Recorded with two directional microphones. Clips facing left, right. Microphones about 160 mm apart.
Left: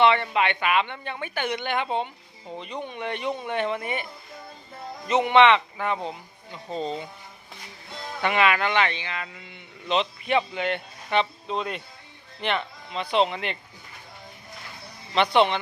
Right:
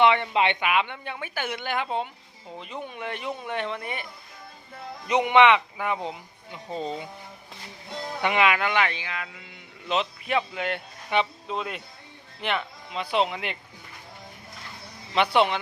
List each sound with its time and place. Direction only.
0.0 s speech: 15° right (ahead or behind)
0.3 s speech: 25° right (ahead or behind)
0.6 s speech: 10° right (ahead or behind)
5.0 s speech: 15° right (ahead or behind)
8.2 s speech: 15° right (ahead or behind)
15.1 s speech: 10° right (ahead or behind)